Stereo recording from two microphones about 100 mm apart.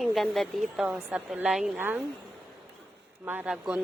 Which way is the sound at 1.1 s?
15° right (ahead or behind).